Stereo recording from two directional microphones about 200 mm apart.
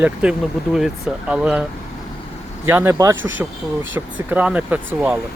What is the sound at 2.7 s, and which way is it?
Speech, 10° right (ahead or behind).